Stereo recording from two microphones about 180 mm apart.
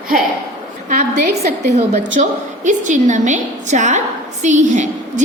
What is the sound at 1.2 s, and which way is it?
A woman's voice, 40° right (ahead or behind).